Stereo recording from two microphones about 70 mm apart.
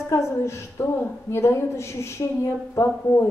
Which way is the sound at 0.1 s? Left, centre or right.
Left.